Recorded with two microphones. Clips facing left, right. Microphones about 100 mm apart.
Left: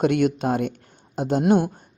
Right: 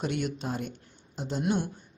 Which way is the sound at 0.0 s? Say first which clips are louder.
Left 11 dB; 60° left (ahead or behind).